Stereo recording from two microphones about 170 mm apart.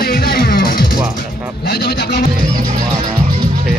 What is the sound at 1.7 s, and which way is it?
Speech, 70° left (ahead or behind).